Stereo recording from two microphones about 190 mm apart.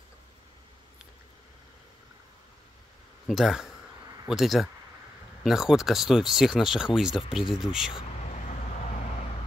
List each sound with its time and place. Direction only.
3.3 s speech: centre (ahead or behind)
8.2 s vehicle: 35° left (ahead or behind)